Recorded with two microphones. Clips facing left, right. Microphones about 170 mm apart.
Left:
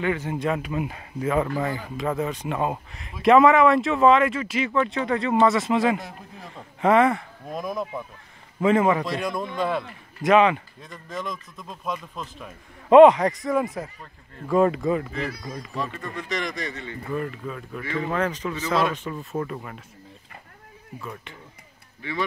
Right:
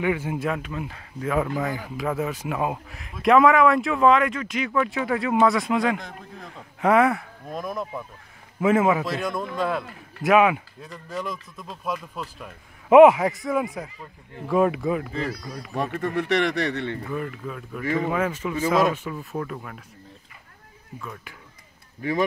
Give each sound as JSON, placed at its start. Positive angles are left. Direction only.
{"t": 0.0, "sound": "a man's voice", "side_deg": -10}
{"t": 1.2, "sound": "a man's voice", "side_deg": 0}
{"t": 15.7, "sound": "speech", "side_deg": -60}
{"t": 17.1, "sound": "a man's voice", "side_deg": 0}
{"t": 22.0, "sound": "speech", "side_deg": -45}